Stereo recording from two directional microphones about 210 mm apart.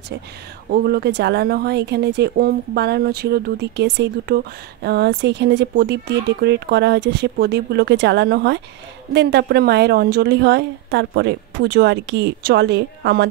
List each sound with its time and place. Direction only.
0.7 s speech: 50° right (ahead or behind)